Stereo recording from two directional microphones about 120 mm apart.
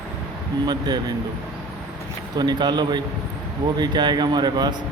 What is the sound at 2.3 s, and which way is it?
A man's voice, 35° right (ahead or behind).